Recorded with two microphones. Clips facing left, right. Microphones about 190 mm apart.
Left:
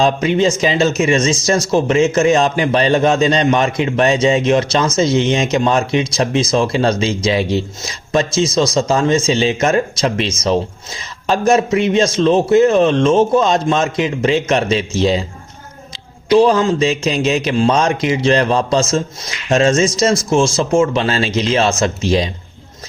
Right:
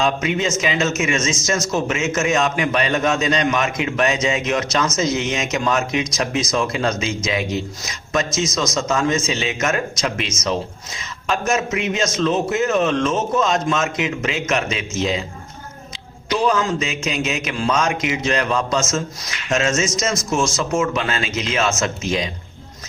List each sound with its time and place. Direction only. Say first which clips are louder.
0.0 s speech: left 6 dB; 35° left (ahead or behind)
16.3 s speech: left 8 dB; 30° left (ahead or behind)